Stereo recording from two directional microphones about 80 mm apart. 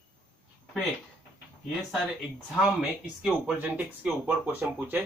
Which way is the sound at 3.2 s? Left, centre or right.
Centre.